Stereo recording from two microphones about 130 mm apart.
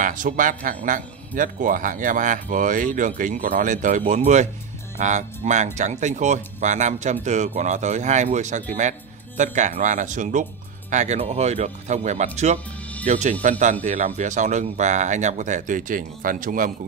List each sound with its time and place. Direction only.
0.0 s a man's voice: 90° right; by 10.4 s 75° right (ahead or behind)
10.9 s speech: 65° right (ahead or behind)
13.8 s speech: 60° right (ahead or behind); by 16.7 s 90° right